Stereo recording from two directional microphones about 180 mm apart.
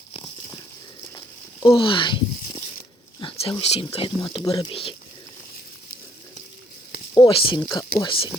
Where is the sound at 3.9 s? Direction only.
30° left (ahead or behind).